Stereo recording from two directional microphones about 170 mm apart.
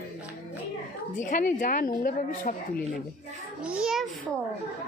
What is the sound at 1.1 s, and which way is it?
A woman's voice, 50° left (ahead or behind).